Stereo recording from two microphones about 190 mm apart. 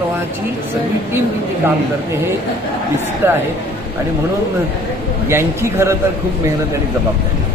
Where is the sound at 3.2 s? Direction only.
10° right (ahead or behind).